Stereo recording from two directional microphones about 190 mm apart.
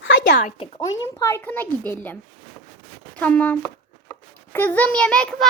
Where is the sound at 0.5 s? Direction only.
30° left (ahead or behind).